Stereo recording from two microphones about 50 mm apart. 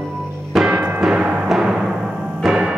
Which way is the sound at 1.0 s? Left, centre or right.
Right.